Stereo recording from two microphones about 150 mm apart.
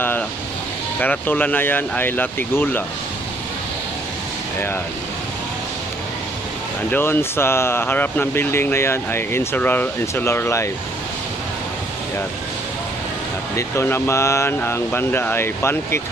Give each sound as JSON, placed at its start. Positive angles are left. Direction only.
{"t": 0.9, "sound": "speech", "side_deg": 10}
{"t": 6.9, "sound": "speech", "side_deg": 15}
{"t": 13.6, "sound": "speech", "side_deg": 15}